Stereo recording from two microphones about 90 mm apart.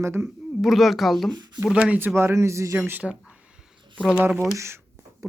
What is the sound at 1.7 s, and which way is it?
Speech, 10° right (ahead or behind).